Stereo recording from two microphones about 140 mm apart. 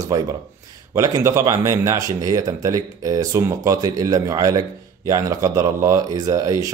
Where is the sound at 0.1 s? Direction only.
25° right (ahead or behind).